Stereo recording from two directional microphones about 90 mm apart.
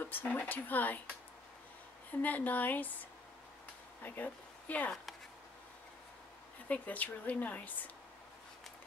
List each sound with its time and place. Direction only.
0.0 s speech: 20° left (ahead or behind)
2.2 s speech: 20° left (ahead or behind)
6.7 s speech: 15° left (ahead or behind)